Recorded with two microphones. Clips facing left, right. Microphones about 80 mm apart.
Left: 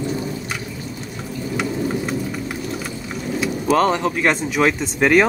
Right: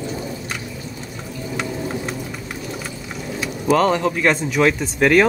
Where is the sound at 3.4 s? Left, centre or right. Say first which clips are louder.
Even; centre.